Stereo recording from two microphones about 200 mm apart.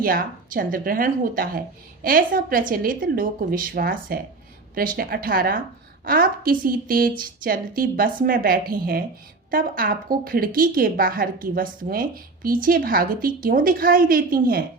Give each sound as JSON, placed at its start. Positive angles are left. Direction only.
{"t": 0.0, "sound": "a woman's voice", "side_deg": -45}